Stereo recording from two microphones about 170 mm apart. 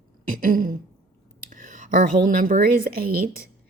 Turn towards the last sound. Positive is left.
turn(degrees=-60)  # may be behind; listen again after turning